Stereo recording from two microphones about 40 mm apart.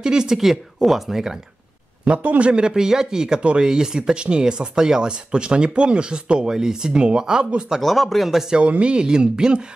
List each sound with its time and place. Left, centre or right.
0.0 s speech: centre
2.1 s a man's voice: right
2.5 s speech: centre
7.8 s speech: centre
8.5 s speech: right